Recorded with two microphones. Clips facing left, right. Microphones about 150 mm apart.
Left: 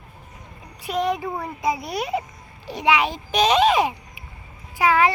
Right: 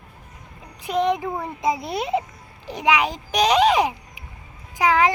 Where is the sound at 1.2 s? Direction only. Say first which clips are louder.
Right 1 dB; 5° left (ahead or behind).